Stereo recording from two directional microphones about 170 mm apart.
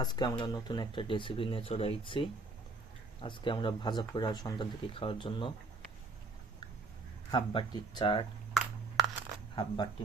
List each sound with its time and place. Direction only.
0.0 s speech: 25° left (ahead or behind)
7.3 s speech: 25° left (ahead or behind)
9.6 s speech: 25° left (ahead or behind)